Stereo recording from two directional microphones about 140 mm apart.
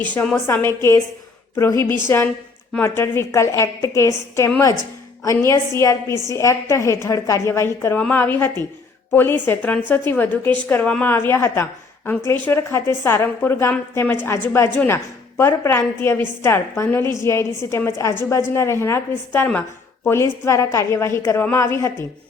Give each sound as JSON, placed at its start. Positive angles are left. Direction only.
{"t": 0.0, "sound": "a woman's voice", "side_deg": 10}